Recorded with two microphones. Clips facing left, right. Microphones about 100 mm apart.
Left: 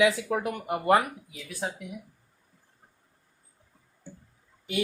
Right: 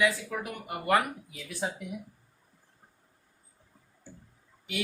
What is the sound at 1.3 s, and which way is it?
Speech, centre (ahead or behind).